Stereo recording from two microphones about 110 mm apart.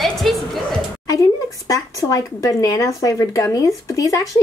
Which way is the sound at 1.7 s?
30° left (ahead or behind).